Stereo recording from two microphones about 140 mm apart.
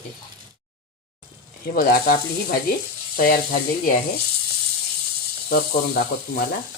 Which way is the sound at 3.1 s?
85° left.